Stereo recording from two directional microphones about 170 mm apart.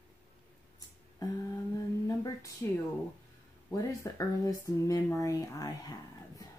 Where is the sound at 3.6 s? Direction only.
20° left (ahead or behind).